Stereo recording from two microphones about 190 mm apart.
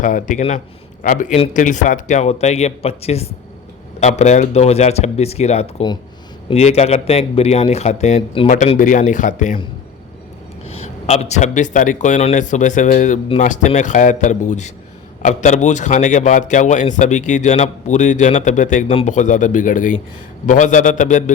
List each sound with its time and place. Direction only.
0.0 s a man's voice: 40° left (ahead or behind)
10.7 s a man's voice: 35° left (ahead or behind)